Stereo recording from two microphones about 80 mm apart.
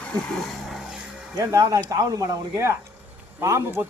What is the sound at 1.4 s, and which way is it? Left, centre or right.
Speech, right.